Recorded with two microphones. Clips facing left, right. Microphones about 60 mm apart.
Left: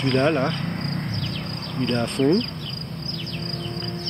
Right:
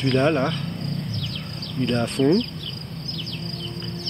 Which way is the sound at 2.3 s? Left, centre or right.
Left.